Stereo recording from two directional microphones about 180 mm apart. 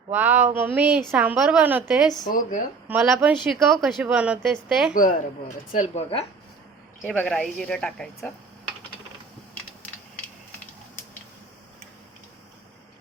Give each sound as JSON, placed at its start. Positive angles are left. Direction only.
{"t": 0.1, "sound": "a woman's voice", "side_deg": -10}
{"t": 2.2, "sound": "speech", "side_deg": 50}
{"t": 2.8, "sound": "a woman's voice", "side_deg": -10}
{"t": 4.9, "sound": "speech", "side_deg": 50}
{"t": 7.0, "sound": "speech", "side_deg": 0}